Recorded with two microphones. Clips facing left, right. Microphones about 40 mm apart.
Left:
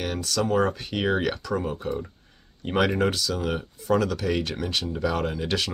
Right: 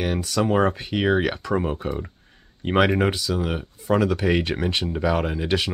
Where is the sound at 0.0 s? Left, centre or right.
Centre.